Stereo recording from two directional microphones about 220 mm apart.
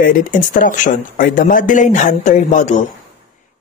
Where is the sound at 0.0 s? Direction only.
40° left (ahead or behind).